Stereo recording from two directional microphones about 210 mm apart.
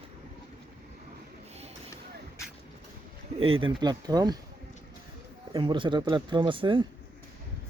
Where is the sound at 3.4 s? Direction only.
25° right (ahead or behind).